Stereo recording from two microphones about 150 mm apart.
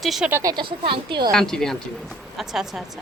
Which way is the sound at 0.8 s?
35° right (ahead or behind).